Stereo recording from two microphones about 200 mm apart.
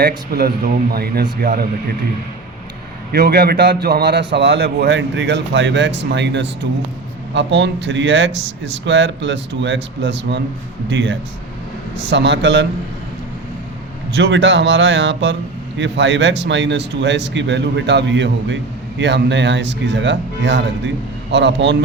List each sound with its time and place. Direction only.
0.0 s speech: 50° right (ahead or behind)
3.1 s speech: 55° right (ahead or behind)
14.1 s speech: 65° right (ahead or behind)